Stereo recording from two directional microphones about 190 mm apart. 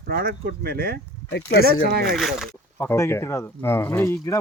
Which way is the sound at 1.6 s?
55° right (ahead or behind).